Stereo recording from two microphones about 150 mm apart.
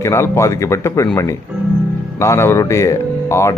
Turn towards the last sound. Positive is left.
turn(degrees=20)  # may be behind; listen again after turning